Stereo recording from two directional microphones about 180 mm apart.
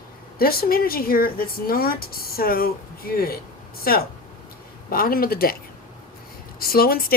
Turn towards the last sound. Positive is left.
turn(degrees=55)  # may be behind; listen again after turning